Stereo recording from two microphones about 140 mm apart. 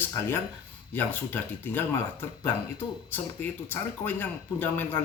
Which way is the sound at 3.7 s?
15° left (ahead or behind).